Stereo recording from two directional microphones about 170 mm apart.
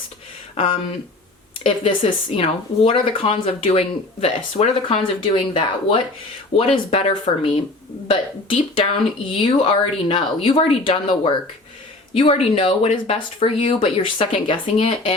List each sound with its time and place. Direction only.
0.5 s speech: 35° left (ahead or behind)